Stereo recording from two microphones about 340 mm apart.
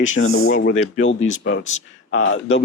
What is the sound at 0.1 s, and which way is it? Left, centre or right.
Speech, left.